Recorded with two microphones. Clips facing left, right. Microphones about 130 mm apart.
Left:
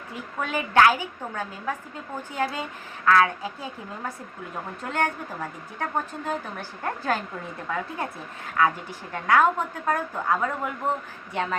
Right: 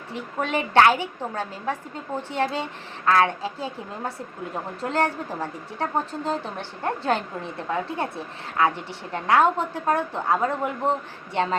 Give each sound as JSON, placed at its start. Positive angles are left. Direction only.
{"t": 0.1, "sound": "a woman's voice", "side_deg": -25}